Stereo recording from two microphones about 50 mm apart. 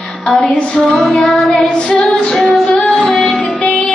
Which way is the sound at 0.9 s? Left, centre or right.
Centre.